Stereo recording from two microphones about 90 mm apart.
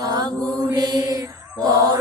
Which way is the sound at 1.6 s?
45° right (ahead or behind).